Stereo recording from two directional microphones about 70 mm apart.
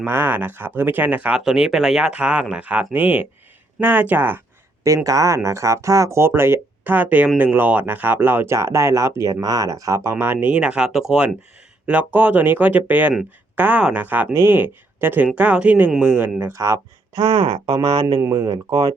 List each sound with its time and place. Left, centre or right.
0.0 s speech: right
1.5 s speech: centre; by 4.4 s right
5.0 s speech: right
8.5 s speech: right
9.3 s speech: right
10.6 s speech: centre
11.9 s speech: right
16.5 s speech: right
18.3 s speech: right